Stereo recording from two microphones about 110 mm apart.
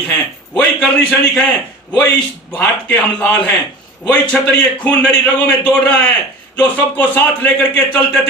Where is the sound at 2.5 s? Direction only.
15° left (ahead or behind).